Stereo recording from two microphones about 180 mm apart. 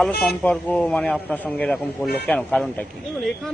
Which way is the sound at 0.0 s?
5° left (ahead or behind).